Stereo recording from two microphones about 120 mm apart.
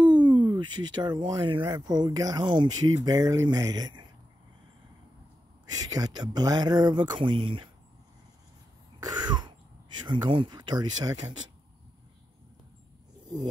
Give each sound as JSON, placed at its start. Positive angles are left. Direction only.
{"t": 0.0, "sound": "speech", "side_deg": -40}
{"t": 5.7, "sound": "speech", "side_deg": -30}
{"t": 10.0, "sound": "speech", "side_deg": -40}